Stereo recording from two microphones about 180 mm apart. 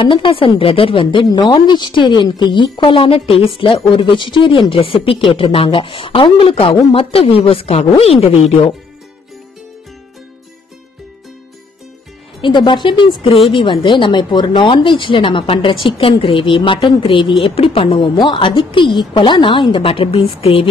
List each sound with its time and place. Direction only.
0.0 s a woman's voice: 30° left (ahead or behind)
12.4 s a woman's voice: 25° left (ahead or behind)